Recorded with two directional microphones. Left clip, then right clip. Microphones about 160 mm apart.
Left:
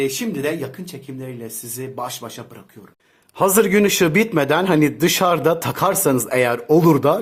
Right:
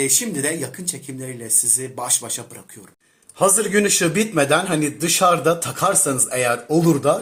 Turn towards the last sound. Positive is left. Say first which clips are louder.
# left 3 dB
turn(degrees=45)  # may be behind; listen again after turning